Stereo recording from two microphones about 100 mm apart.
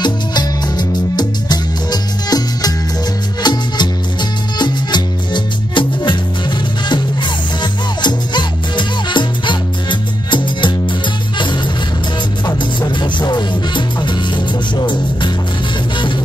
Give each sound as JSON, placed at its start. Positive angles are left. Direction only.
{"t": 0.0, "sound": "music", "side_deg": 45}
{"t": 7.6, "sound": "music", "side_deg": 50}
{"t": 12.4, "sound": "music", "side_deg": 45}